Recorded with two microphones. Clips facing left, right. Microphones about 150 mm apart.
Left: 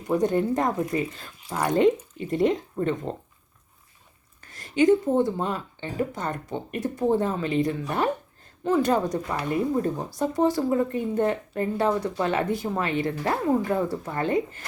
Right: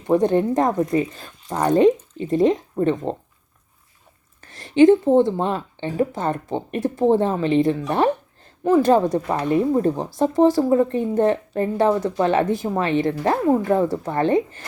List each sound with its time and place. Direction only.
0.1 s speech: 25° right (ahead or behind)
1.8 s speech: 20° right (ahead or behind)
4.4 s speech: 25° right (ahead or behind)